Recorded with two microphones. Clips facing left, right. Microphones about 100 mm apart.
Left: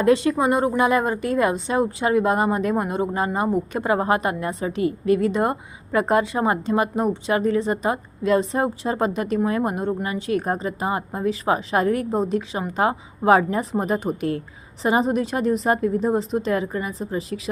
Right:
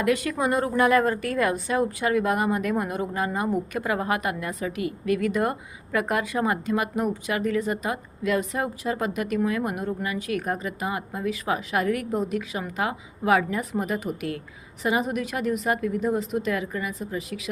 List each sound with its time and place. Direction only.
0.0 s speech: 30° left (ahead or behind)